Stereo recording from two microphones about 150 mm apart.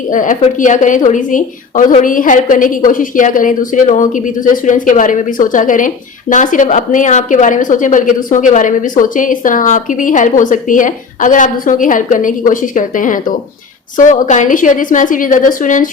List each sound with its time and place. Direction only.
0.1 s a woman's voice: 60° left (ahead or behind)